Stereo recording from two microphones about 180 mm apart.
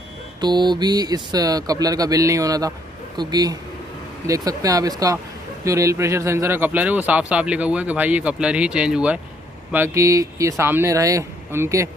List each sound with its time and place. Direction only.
0.4 s speech: 25° right (ahead or behind)